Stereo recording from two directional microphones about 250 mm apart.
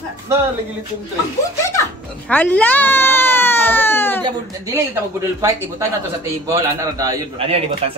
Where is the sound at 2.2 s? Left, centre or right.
Centre.